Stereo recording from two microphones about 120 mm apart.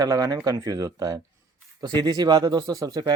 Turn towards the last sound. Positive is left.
turn(degrees=-30)  # may be behind; listen again after turning